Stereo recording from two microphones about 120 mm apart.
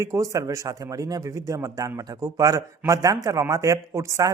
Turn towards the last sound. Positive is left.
turn(degrees=-25)  # may be behind; listen again after turning